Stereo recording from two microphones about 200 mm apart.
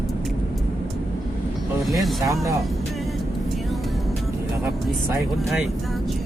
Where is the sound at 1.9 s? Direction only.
Centre (ahead or behind).